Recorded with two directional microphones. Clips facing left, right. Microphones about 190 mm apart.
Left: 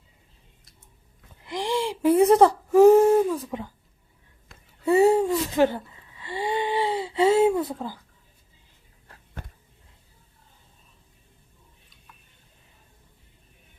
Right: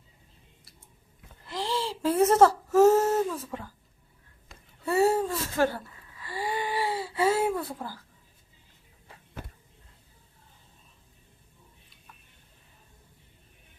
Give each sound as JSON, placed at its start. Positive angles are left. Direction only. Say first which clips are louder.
{"t": 1.5, "sound": "whimper", "louder": "left 4 dB", "side_deg": 15}
{"t": 4.5, "sound": "wheeze", "louder": "even", "side_deg": 0}
{"t": 4.9, "sound": "a sound", "louder": "left 6 dB", "side_deg": 15}